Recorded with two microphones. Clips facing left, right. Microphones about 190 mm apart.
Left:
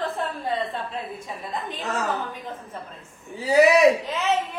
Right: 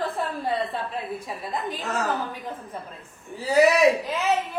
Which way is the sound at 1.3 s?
Centre (ahead or behind).